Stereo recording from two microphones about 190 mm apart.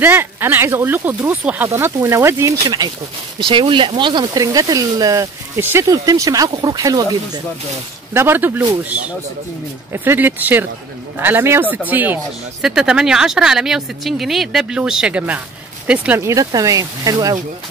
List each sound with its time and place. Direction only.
0.0 s speech: 10° right (ahead or behind)